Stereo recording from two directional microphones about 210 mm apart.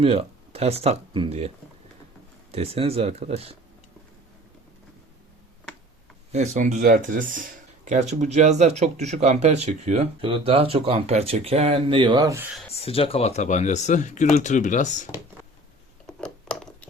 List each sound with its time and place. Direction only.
0.0 s speech: 25° right (ahead or behind)
2.5 s speech: 30° right (ahead or behind)
6.3 s speech: 35° right (ahead or behind); by 12.5 s 15° right (ahead or behind)
12.8 s speech: 25° left (ahead or behind)
16.0 s a sound: 5° left (ahead or behind)